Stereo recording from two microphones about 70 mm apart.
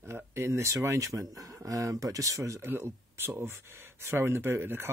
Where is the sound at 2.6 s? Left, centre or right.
Right.